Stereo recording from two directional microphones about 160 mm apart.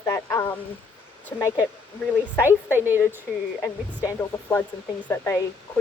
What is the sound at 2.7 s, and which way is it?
Speech, 15° right (ahead or behind).